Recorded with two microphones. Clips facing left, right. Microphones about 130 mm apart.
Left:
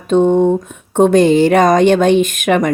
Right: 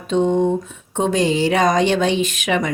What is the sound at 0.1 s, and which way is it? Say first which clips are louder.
A woman's voice: left 6 dB; 50° left (ahead or behind).